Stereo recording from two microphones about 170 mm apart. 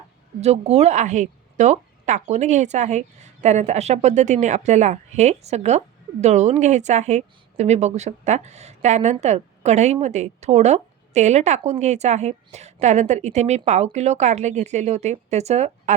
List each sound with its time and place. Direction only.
0.4 s a woman's voice: 40° right (ahead or behind)